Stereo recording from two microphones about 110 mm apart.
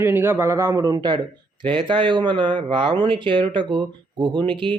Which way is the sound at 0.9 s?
45° right (ahead or behind).